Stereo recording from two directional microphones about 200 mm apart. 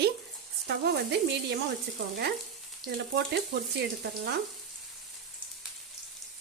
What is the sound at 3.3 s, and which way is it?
Speech, 55° right (ahead or behind).